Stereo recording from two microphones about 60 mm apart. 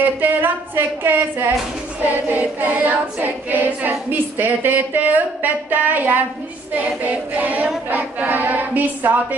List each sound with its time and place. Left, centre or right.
0.0 s speech: right
2.3 s a capella: right
4.1 s speech: right
7.0 s a capella: right